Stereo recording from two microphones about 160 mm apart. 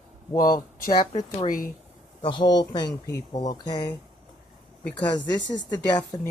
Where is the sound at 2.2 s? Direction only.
30° left (ahead or behind).